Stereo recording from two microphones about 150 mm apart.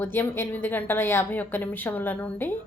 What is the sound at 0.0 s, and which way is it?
A woman's voice, 15° left (ahead or behind).